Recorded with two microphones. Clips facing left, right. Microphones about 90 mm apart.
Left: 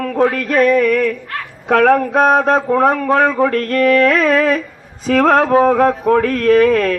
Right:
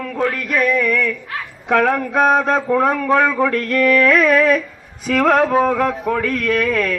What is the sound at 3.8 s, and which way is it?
A man's voice, 30° left (ahead or behind).